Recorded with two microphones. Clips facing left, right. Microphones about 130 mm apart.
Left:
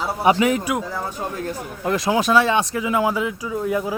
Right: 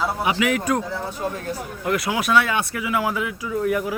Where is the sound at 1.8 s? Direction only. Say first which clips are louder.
Left 4 dB; 25° left (ahead or behind).